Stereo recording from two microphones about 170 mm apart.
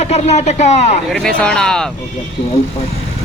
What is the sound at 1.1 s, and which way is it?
Speech, 5° left (ahead or behind).